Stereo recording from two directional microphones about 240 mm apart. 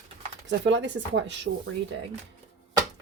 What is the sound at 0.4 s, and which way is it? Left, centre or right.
Speech, right.